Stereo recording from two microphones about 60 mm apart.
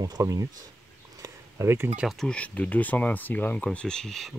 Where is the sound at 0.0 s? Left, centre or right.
Right.